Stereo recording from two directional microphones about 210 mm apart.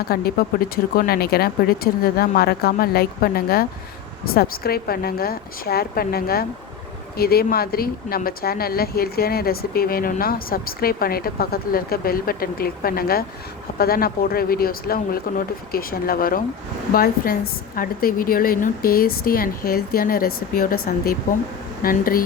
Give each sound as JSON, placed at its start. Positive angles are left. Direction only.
{"t": 0.0, "sound": "speech", "side_deg": 45}